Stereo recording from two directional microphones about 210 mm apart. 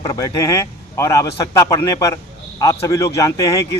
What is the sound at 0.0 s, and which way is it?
A man's voice, 15° left (ahead or behind).